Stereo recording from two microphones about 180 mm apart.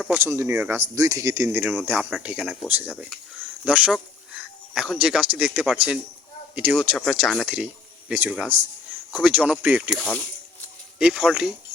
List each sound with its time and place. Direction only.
0.2 s speech: 15° right (ahead or behind)